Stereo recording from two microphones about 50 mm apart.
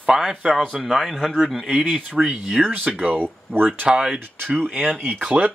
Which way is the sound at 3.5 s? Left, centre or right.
Right.